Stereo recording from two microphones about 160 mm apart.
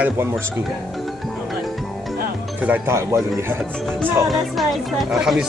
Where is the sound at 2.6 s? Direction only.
15° right (ahead or behind).